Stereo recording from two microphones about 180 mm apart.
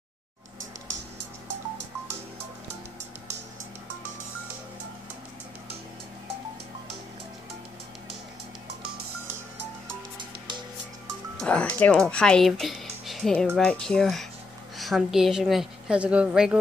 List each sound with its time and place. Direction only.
11.4 s a woman's voice: 5° left (ahead or behind)